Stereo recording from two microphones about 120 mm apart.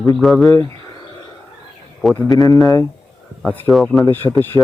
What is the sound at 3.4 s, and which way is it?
Speech, 15° left (ahead or behind).